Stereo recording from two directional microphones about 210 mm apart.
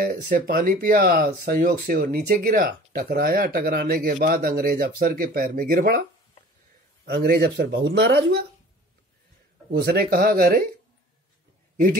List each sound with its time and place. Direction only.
0.0 s speech: 45° right (ahead or behind)
7.1 s speech: 50° right (ahead or behind)
9.7 s speech: 50° right (ahead or behind)
11.7 s a man's voice: 40° right (ahead or behind)